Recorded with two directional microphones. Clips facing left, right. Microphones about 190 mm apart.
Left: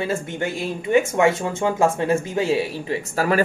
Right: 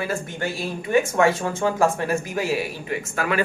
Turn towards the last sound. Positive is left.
turn(degrees=35)  # may be behind; listen again after turning